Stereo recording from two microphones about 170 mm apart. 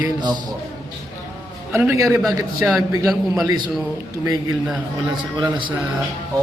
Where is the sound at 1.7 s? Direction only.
15° right (ahead or behind).